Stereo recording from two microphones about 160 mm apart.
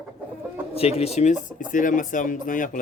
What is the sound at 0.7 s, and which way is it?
Speech, 40° left (ahead or behind).